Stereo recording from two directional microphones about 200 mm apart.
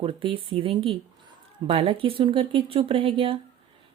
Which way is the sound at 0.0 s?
25° right (ahead or behind).